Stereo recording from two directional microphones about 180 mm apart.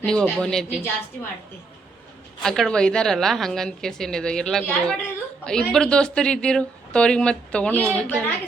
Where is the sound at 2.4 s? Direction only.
5° left (ahead or behind).